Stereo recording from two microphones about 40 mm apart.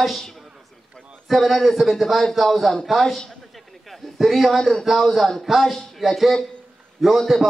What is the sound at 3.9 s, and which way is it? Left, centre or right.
A man's voice, centre.